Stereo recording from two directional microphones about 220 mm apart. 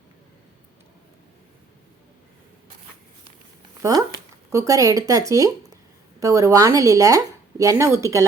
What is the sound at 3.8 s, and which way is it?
Speech, 15° right (ahead or behind).